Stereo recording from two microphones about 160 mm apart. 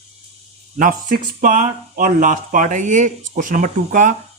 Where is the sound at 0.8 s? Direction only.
55° right (ahead or behind).